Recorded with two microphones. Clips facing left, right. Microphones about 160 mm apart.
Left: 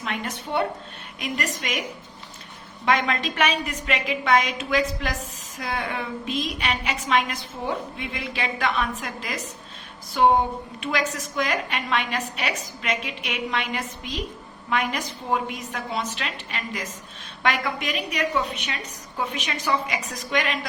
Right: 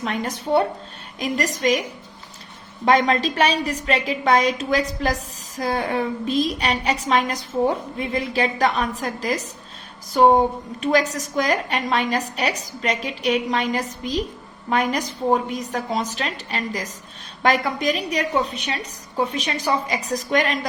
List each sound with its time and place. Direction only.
0.0 s a woman's voice: 40° right (ahead or behind)
2.8 s a woman's voice: 35° right (ahead or behind)